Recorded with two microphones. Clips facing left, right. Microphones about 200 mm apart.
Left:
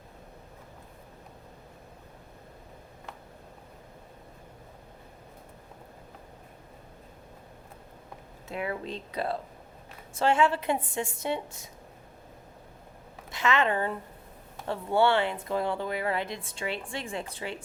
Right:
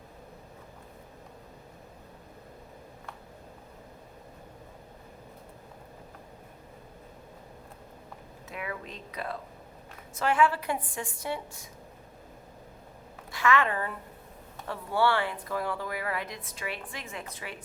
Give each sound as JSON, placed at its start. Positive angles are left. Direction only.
{"t": 8.4, "sound": "speech", "side_deg": 30}
{"t": 13.3, "sound": "a woman's voice", "side_deg": 20}